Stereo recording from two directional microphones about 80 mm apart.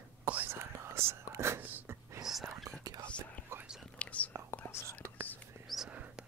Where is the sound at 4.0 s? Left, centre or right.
Centre.